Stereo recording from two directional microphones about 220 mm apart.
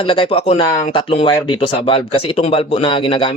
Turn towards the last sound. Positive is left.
turn(degrees=20)  # may be behind; listen again after turning